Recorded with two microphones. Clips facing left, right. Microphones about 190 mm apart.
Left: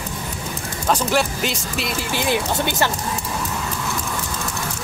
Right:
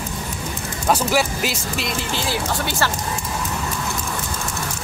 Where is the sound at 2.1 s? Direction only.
20° left (ahead or behind).